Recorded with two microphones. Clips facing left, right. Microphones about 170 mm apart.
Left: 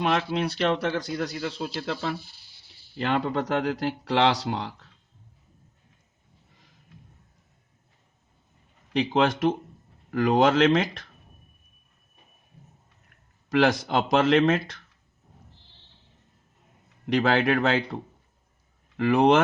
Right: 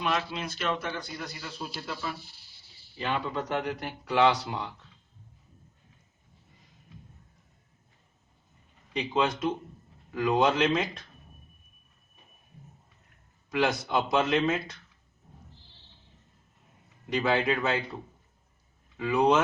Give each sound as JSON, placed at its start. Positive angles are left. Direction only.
{"t": 0.0, "sound": "speech", "side_deg": 60}
{"t": 8.9, "sound": "speech", "side_deg": 80}
{"t": 10.1, "sound": "speech", "side_deg": 75}
{"t": 13.5, "sound": "speech", "side_deg": 85}
{"t": 17.1, "sound": "speech", "side_deg": 75}
{"t": 18.9, "sound": "speech", "side_deg": 80}